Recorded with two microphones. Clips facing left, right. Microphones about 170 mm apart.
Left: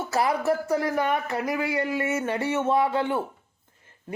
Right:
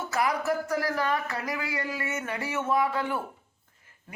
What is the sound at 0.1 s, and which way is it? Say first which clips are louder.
Speech: left 4 dB; 30° left (ahead or behind).